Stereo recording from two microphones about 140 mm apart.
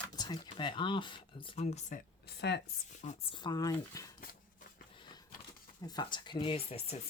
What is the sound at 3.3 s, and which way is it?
Speech, 30° left (ahead or behind).